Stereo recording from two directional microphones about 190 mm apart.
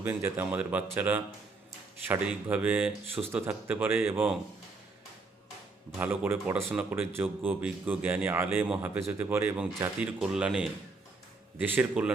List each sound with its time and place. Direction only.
0.0 s speech: 10° right (ahead or behind)
6.0 s speech: 5° right (ahead or behind)